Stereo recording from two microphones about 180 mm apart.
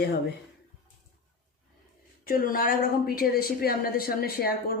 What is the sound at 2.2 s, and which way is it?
A woman's voice, 50° left (ahead or behind).